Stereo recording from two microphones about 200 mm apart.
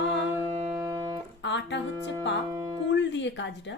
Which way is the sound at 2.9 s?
65° left (ahead or behind).